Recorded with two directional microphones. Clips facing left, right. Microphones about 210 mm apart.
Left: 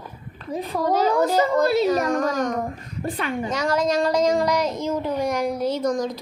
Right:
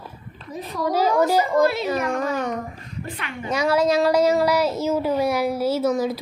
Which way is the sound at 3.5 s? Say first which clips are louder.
Right 4 dB; 10° right (ahead or behind).